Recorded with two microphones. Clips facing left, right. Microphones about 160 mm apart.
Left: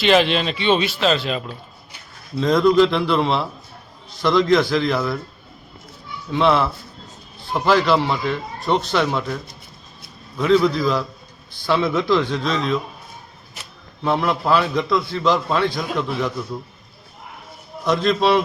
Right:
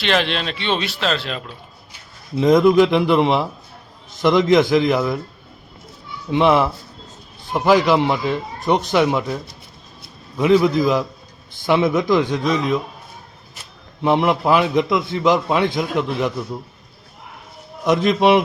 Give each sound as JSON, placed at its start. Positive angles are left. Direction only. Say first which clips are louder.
{"t": 0.0, "sound": "speech", "louder": "left 4 dB", "side_deg": 5}
{"t": 2.3, "sound": "a man's voice", "louder": "right 3 dB", "side_deg": -15}
{"t": 6.3, "sound": "a man's voice", "louder": "right 2 dB", "side_deg": -15}
{"t": 14.0, "sound": "a man's voice", "louder": "right 4 dB", "side_deg": -20}
{"t": 17.8, "sound": "a man's voice", "louder": "right 3 dB", "side_deg": -15}